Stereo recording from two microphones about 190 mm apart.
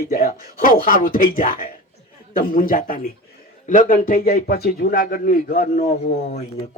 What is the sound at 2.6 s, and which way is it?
A man's voice, 45° left (ahead or behind).